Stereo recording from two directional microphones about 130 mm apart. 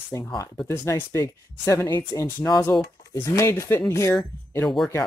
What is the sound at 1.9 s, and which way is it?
Speech, 30° left (ahead or behind).